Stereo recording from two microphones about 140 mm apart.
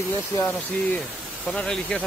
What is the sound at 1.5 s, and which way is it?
Speech, 5° left (ahead or behind).